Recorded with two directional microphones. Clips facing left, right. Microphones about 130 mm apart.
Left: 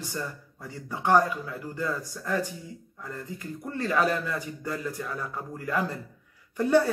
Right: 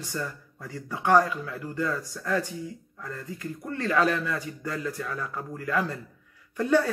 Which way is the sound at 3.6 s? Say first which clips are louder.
Right 1 dB; 15° left (ahead or behind).